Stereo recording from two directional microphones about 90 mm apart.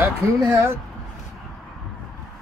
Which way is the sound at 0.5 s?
25° right (ahead or behind).